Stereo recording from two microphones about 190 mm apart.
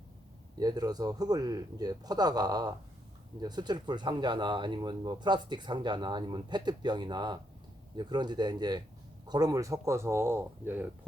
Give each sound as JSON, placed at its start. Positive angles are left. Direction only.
{"t": 0.6, "sound": "speech", "side_deg": -20}